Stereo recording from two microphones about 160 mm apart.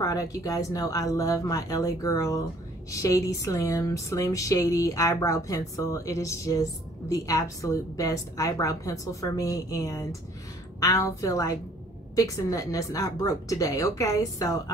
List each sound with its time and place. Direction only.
0.0 s speech: 20° left (ahead or behind)